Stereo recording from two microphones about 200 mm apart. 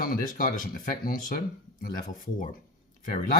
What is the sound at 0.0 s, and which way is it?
Speech, 45° left (ahead or behind).